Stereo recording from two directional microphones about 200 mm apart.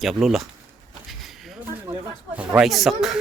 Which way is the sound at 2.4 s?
Centre (ahead or behind).